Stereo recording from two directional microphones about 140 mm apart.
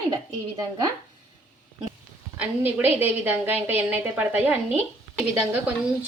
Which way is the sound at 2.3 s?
15° right (ahead or behind).